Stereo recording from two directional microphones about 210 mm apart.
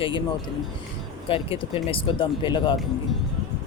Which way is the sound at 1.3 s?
25° left (ahead or behind).